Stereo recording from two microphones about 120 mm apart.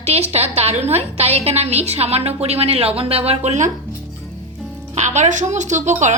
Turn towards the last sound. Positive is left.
turn(degrees=-80)